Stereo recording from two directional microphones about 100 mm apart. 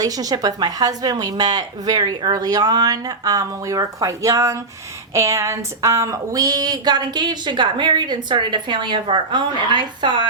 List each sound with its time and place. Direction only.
0.0 s a woman's voice: 40° right (ahead or behind)